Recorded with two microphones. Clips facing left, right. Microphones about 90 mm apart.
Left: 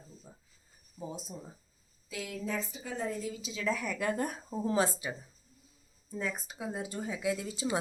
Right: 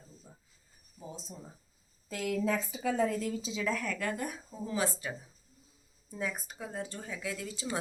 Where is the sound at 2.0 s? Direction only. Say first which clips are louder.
Right 6 dB; 55° right (ahead or behind); by 3.3 s 80° right.